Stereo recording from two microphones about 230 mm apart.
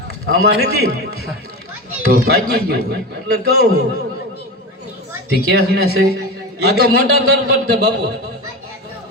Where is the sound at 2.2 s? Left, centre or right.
Right.